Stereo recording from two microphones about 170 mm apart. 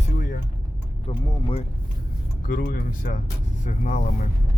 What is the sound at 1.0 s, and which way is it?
Speech, 35° left (ahead or behind).